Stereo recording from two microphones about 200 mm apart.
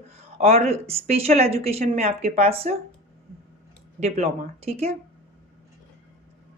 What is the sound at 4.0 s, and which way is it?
Speech, 30° right (ahead or behind).